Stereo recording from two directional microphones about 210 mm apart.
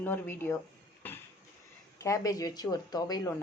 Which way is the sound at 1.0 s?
10° left (ahead or behind).